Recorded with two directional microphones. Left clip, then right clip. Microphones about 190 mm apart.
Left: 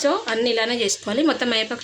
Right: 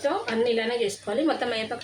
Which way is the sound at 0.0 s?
70° left (ahead or behind).